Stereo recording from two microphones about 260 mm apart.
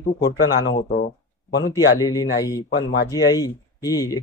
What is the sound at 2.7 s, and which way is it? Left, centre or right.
Speech, left.